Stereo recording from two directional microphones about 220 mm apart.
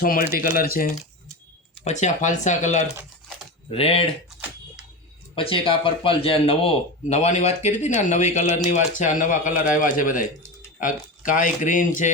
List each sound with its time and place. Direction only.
0.0 s speech: 40° left (ahead or behind)
5.3 s speech: 25° left (ahead or behind)